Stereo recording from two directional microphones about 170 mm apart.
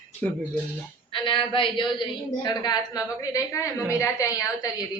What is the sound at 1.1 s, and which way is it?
A woman's voice, 30° left (ahead or behind).